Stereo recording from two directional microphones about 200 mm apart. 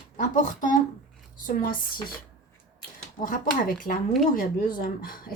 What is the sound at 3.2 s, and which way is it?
Speech, 45° left (ahead or behind).